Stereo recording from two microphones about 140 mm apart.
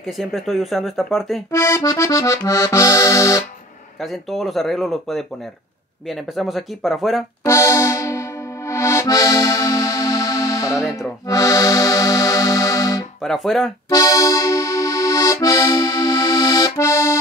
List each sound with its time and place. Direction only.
0.0 s speech: centre (ahead or behind)
1.5 s accordion: 20° left (ahead or behind)
4.0 s speech: centre (ahead or behind)
7.4 s accordion: 20° left (ahead or behind)
13.2 s speech: centre (ahead or behind)
13.8 s accordion: 25° left (ahead or behind)